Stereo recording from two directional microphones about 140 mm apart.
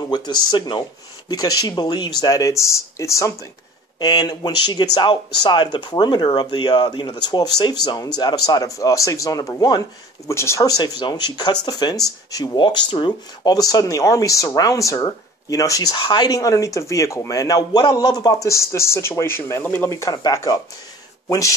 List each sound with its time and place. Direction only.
0.1 s speech: 30° left (ahead or behind)